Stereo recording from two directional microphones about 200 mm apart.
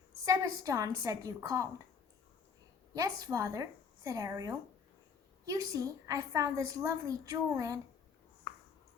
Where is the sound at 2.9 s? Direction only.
15° right (ahead or behind).